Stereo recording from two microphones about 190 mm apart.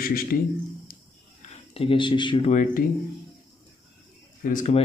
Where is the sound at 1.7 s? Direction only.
30° left (ahead or behind).